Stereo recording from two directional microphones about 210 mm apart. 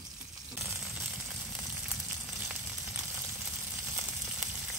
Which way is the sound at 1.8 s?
5° right (ahead or behind).